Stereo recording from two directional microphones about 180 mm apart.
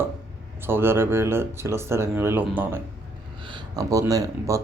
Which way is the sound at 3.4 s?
25° right (ahead or behind).